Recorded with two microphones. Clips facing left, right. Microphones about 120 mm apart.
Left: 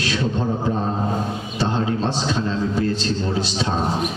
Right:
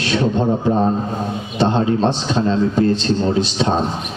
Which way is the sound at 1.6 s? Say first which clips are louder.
Right 6 dB; 25° right (ahead or behind).